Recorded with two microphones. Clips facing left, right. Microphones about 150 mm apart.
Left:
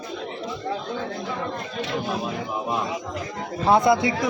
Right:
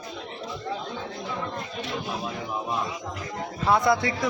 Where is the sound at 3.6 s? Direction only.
20° left (ahead or behind).